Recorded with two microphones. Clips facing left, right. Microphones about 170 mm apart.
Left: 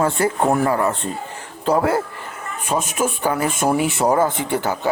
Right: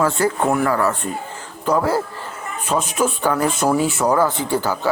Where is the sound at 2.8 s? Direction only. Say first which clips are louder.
Right 3 dB; 45° left (ahead or behind).